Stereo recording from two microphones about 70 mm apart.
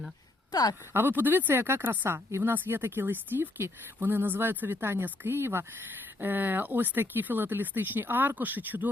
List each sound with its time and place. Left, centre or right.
0.5 s speech: left
0.9 s speech: right